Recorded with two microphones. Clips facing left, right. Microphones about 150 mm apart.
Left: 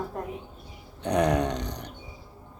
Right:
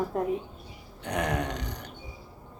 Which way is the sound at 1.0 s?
20° left (ahead or behind).